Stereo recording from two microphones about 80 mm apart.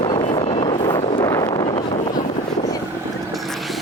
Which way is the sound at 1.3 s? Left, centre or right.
Left.